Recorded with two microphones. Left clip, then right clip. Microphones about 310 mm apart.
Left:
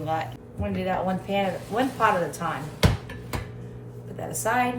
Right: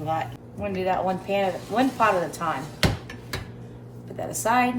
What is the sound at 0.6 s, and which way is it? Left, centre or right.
Speech, right.